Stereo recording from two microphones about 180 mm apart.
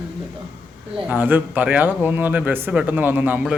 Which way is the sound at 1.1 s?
10° right (ahead or behind).